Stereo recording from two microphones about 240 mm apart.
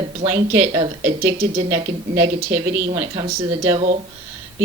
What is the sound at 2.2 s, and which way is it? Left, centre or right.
A woman's voice, centre.